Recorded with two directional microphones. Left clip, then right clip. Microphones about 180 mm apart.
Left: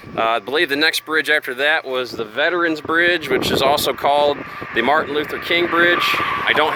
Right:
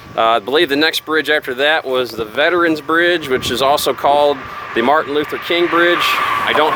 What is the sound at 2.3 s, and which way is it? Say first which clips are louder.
Speech: right 4 dB; 10° left (ahead or behind).